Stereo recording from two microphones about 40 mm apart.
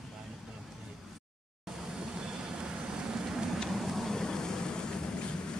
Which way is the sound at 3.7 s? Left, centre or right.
Centre.